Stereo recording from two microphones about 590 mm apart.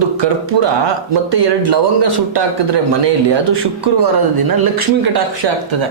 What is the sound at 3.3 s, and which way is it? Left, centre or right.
A man's voice, right.